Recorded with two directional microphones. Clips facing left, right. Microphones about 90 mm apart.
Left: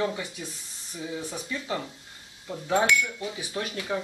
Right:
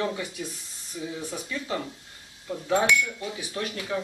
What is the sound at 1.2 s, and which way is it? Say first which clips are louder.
Speech: even; 10° left (ahead or behind).